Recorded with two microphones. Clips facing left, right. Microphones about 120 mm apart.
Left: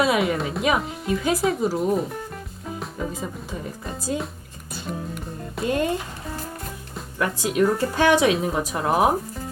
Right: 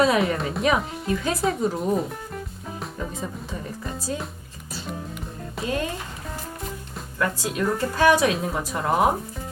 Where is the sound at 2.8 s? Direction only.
Centre (ahead or behind).